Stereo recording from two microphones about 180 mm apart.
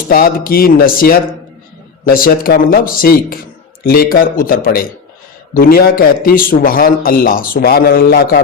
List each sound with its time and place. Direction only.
0.1 s a man's voice: 55° left (ahead or behind)